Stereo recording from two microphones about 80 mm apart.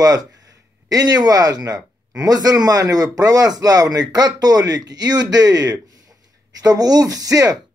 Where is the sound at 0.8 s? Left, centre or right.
Right.